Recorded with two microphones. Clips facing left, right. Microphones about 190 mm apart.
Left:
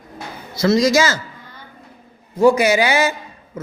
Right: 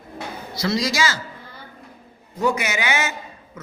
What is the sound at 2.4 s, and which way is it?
Speech, 30° left (ahead or behind).